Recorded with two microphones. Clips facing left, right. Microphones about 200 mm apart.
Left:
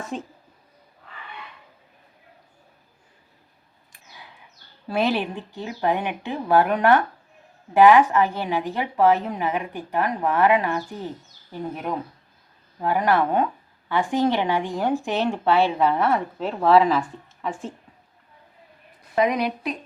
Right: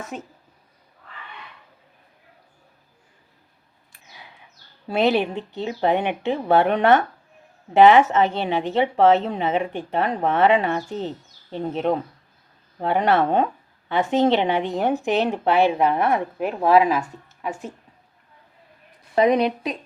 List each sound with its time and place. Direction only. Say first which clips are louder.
0.0 s speech: left 2 dB; 5° right (ahead or behind)
4.9 s speech: right 3 dB; 20° right (ahead or behind)
19.1 s speech: right 4 dB; 30° right (ahead or behind)